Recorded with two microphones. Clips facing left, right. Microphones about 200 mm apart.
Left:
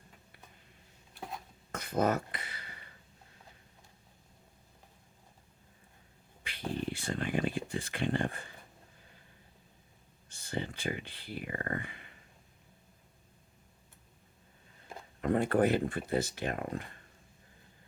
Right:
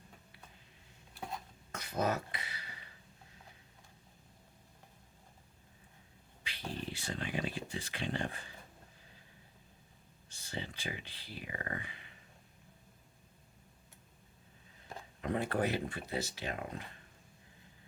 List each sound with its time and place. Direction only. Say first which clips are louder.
1.7 s a sound: left 5 dB; 50° left (ahead or behind)
6.4 s speech: left 6 dB; 55° left (ahead or behind)
10.2 s speech: left 6 dB; 55° left (ahead or behind)
15.2 s speech: left 6 dB; 50° left (ahead or behind)